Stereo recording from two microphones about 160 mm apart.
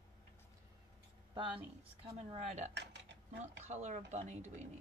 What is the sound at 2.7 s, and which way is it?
Speech, 90° right.